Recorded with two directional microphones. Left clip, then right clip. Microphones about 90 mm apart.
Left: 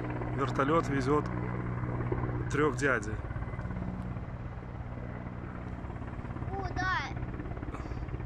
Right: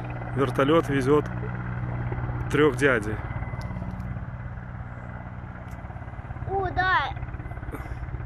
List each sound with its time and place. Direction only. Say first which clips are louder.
0.4 s speech: right 7 dB; 20° right (ahead or behind)
2.5 s speech: right 8 dB; 20° right (ahead or behind)
6.6 s vehicle: right 9 dB; 50° right (ahead or behind)